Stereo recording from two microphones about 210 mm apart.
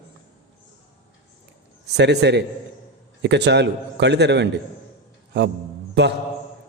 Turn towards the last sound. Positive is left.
turn(degrees=-55)  # may be behind; listen again after turning